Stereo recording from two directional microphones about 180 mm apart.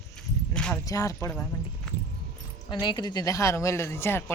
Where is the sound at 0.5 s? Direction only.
5° left (ahead or behind).